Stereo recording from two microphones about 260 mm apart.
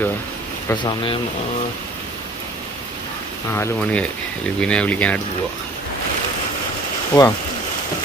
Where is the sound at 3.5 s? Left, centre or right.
Centre.